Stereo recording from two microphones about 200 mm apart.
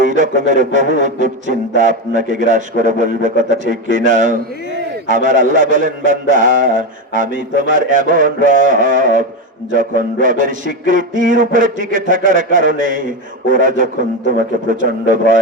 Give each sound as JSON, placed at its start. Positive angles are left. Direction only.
{"t": 0.0, "sound": "speech", "side_deg": -40}